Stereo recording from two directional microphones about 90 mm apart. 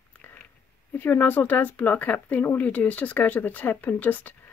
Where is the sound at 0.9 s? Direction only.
20° left (ahead or behind).